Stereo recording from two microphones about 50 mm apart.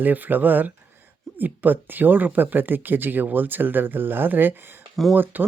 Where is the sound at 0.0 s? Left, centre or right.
Right.